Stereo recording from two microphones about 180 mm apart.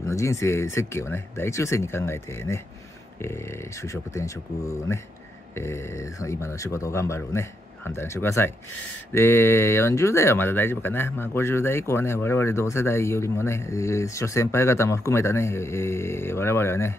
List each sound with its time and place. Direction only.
0.0 s speech: 15° left (ahead or behind)
3.9 s speech: 15° left (ahead or behind)
6.2 s speech: 15° left (ahead or behind)